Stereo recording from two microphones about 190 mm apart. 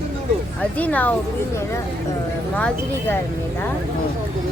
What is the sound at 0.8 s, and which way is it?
Speech, 10° left (ahead or behind).